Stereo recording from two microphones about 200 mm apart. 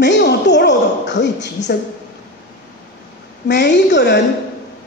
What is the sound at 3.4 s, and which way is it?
Speech, 60° left (ahead or behind).